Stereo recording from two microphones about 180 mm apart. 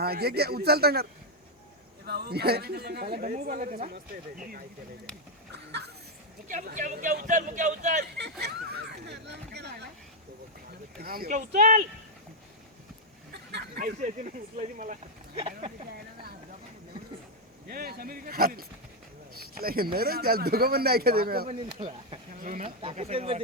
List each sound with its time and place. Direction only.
0.0 s speech: 60° right (ahead or behind)
2.0 s speech: 60° right (ahead or behind); by 3.9 s 45° right (ahead or behind)
6.5 s a man's voice: 45° right (ahead or behind)
8.2 s a sound: 65° right (ahead or behind)
11.0 s a man's voice: 55° right (ahead or behind)
13.3 s a sound: 65° right (ahead or behind)
13.7 s a man's voice: 45° right (ahead or behind)
15.4 s speech: 30° right (ahead or behind)
17.7 s speech: 55° right (ahead or behind)
21.4 s speech: 35° right (ahead or behind)